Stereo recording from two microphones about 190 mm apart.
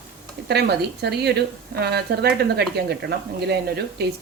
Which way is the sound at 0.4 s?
60° right (ahead or behind).